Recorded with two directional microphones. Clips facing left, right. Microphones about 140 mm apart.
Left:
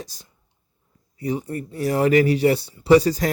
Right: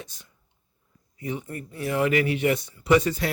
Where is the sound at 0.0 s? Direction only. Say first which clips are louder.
Left 5 dB; 35° left (ahead or behind).